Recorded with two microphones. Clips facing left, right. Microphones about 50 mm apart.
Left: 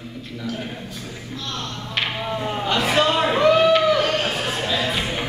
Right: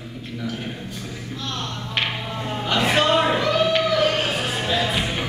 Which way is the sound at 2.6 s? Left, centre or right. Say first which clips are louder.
Even; centre.